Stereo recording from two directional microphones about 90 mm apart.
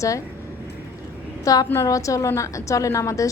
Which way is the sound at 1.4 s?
45° left (ahead or behind).